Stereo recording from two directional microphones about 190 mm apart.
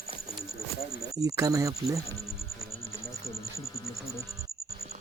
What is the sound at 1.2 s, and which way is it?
Speech, 15° right (ahead or behind).